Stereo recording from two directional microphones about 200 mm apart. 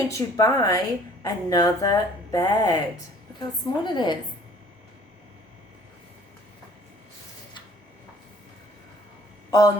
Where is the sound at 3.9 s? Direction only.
20° left (ahead or behind).